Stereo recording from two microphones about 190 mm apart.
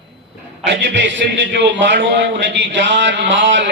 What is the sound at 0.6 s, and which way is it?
A man's voice, 70° right (ahead or behind).